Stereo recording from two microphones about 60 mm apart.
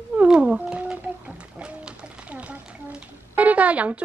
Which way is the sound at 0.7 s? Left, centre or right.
Centre.